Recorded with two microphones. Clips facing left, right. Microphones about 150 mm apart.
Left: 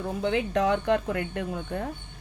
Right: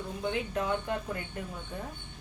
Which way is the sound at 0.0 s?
75° left (ahead or behind).